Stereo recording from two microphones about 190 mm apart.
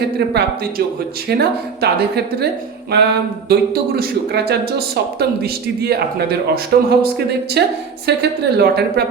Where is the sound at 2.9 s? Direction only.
60° right (ahead or behind).